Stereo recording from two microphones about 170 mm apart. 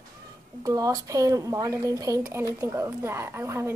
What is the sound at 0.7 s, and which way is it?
A woman's voice, 20° right (ahead or behind).